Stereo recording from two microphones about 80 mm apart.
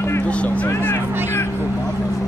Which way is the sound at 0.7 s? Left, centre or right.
Left.